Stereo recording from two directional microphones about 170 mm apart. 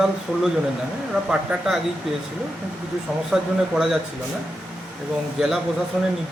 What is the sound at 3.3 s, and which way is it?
Speech, 5° right (ahead or behind).